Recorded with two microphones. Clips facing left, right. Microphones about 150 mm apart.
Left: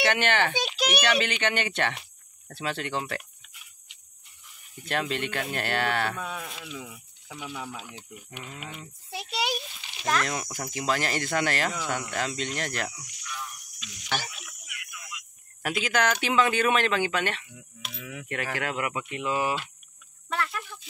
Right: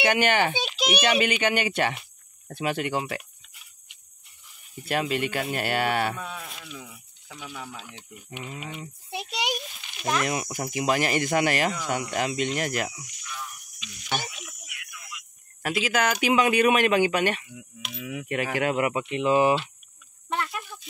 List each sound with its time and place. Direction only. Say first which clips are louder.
0.0 s speech: right 2 dB; 10° right (ahead or behind)
4.8 s speech: right 3 dB; 10° right (ahead or behind)
6.8 s speech: left 3 dB; 5° left (ahead or behind)
10.0 s speech: right 2 dB; 10° right (ahead or behind)
15.6 s speech: right 1 dB; 5° right (ahead or behind); by 20.6 s 20° right (ahead or behind)